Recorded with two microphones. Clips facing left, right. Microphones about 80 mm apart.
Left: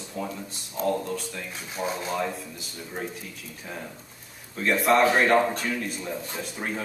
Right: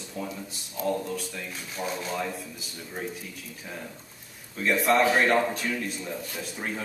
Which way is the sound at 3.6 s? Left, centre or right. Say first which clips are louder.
Left 2 dB; centre.